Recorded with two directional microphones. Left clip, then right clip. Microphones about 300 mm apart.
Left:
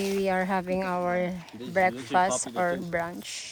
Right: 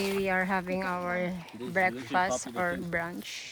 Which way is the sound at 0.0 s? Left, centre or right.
Centre.